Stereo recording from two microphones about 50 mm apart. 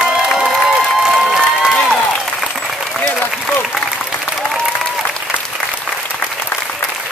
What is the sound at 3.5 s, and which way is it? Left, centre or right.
Applause, left.